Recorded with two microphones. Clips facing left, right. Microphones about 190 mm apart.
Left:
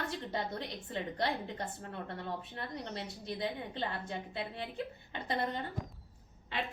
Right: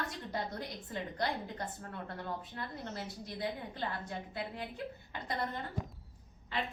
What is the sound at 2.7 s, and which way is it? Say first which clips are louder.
A woman's voice: left 1 dB; 20° left (ahead or behind).